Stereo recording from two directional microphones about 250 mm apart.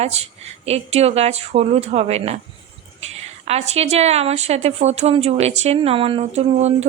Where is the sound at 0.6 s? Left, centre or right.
Right.